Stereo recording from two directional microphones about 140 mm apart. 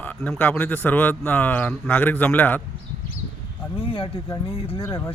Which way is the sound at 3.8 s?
40° left (ahead or behind).